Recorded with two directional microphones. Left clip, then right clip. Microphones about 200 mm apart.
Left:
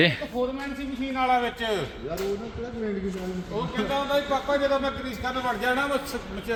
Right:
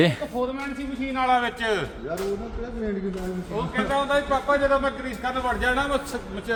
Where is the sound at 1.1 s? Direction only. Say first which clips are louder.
Right 2 dB; 15° left (ahead or behind).